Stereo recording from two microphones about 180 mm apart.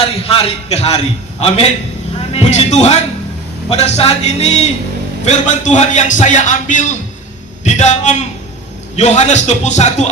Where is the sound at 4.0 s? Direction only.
35° left (ahead or behind).